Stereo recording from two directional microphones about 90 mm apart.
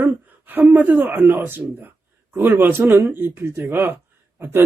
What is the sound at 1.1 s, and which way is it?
Speech, 20° right (ahead or behind).